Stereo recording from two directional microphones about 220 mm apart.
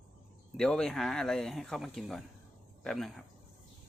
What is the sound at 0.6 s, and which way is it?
Speech, 5° left (ahead or behind).